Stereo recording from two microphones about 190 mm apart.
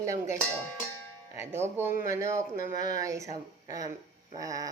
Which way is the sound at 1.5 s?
35° right (ahead or behind).